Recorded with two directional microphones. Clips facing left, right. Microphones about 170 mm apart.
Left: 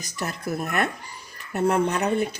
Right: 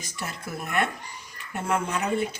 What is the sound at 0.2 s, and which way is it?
Speech, 40° left (ahead or behind).